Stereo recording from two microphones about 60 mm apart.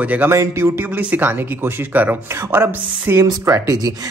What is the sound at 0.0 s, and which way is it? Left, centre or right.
Speech, right.